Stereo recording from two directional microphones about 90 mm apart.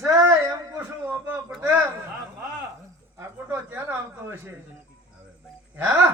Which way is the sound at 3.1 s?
25° right (ahead or behind).